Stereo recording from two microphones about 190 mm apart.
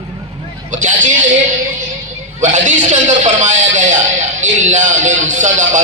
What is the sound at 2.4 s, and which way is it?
Speech, 40° right (ahead or behind).